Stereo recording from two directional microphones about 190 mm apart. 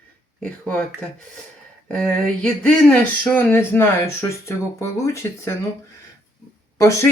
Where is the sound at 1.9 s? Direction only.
5° left (ahead or behind).